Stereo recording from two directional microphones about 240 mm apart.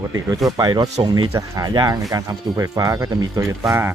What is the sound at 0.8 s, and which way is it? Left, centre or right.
Speech, right.